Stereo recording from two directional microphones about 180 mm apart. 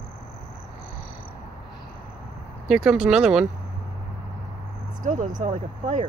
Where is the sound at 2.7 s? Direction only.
Centre (ahead or behind).